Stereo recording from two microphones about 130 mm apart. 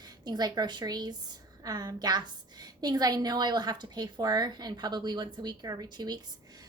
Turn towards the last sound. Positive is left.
turn(degrees=-30)  # may be behind; listen again after turning